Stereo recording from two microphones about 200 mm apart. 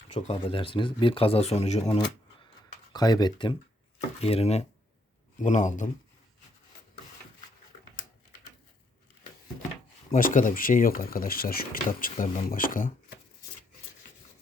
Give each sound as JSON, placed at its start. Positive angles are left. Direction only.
{"t": 0.1, "sound": "speech", "side_deg": 35}
{"t": 2.9, "sound": "speech", "side_deg": 20}
{"t": 10.1, "sound": "speech", "side_deg": 45}